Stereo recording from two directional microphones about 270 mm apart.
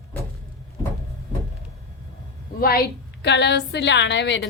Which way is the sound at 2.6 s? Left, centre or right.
Left.